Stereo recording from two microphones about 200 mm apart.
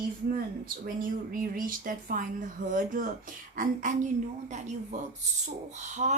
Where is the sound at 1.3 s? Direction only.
45° right (ahead or behind).